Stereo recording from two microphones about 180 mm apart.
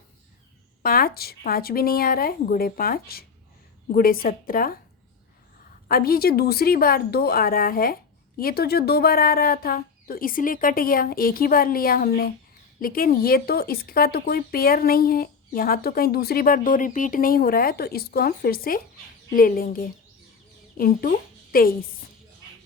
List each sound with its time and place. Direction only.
0.8 s a woman's voice: 55° left (ahead or behind)
5.9 s a woman's voice: 55° left (ahead or behind)